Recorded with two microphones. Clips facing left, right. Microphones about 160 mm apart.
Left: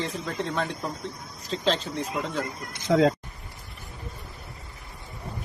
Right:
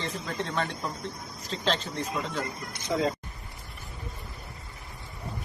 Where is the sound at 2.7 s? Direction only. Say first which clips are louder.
Left 7 dB; 85° left.